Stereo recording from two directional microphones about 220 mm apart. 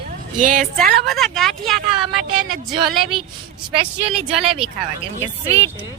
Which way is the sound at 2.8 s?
Centre (ahead or behind).